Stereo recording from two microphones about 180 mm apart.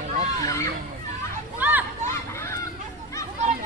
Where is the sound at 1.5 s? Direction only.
10° right (ahead or behind).